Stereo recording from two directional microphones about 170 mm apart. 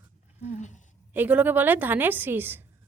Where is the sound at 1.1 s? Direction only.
10° right (ahead or behind).